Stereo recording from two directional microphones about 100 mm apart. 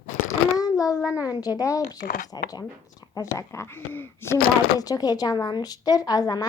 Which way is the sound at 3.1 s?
30° left (ahead or behind).